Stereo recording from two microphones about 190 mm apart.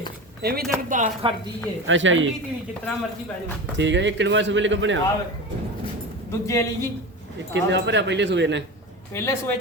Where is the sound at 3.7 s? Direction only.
70° right (ahead or behind).